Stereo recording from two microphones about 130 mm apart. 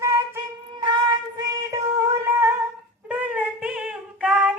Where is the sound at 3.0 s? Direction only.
10° right (ahead or behind).